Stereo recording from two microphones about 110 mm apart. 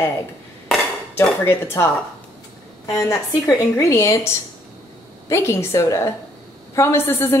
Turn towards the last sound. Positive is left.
turn(degrees=20)  # may be behind; listen again after turning